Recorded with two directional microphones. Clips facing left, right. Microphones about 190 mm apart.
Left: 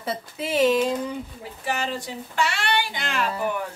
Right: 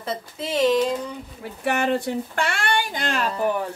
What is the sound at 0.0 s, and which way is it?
Speech, 5° left (ahead or behind).